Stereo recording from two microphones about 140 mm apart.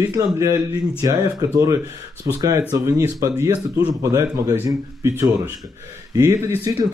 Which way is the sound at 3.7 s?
20° right (ahead or behind).